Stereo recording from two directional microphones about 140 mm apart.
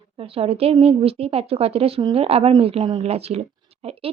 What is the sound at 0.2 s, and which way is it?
Speech, 45° right (ahead or behind).